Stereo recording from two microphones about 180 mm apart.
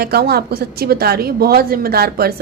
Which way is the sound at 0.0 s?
60° right (ahead or behind).